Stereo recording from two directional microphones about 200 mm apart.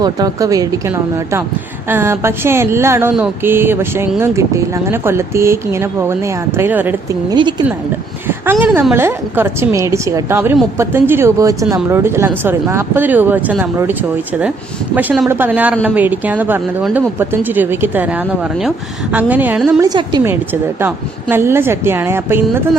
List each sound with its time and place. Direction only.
0.0 s speech: 20° right (ahead or behind)
14.9 s speech: 5° right (ahead or behind)
19.9 s a woman's voice: 20° right (ahead or behind)
20.3 s speech: 10° right (ahead or behind)